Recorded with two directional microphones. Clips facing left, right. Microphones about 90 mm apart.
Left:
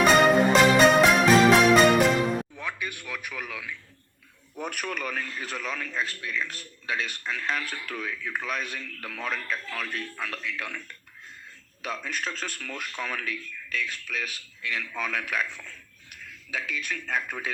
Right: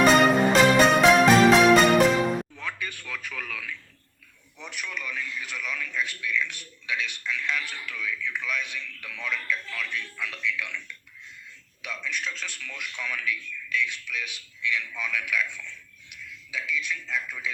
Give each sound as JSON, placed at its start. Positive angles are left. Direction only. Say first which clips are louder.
{"t": 0.0, "sound": "music", "louder": "even", "side_deg": 0}
{"t": 2.6, "sound": "speech", "louder": "left 1 dB", "side_deg": 15}
{"t": 4.5, "sound": "a man's voice", "louder": "left 5 dB", "side_deg": 45}